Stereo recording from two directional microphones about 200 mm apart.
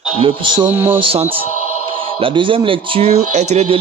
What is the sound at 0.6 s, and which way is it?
Speech, 10° right (ahead or behind).